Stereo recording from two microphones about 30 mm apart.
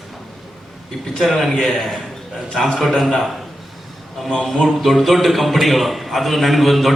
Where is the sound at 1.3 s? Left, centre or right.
Centre.